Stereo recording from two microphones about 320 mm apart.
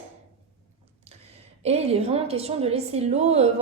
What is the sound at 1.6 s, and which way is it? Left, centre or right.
A woman's voice, centre.